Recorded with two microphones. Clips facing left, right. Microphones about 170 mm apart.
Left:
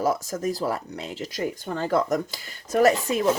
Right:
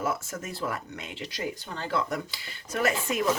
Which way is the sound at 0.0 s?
35° left (ahead or behind).